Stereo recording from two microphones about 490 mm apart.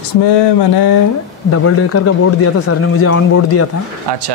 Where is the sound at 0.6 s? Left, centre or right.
Left.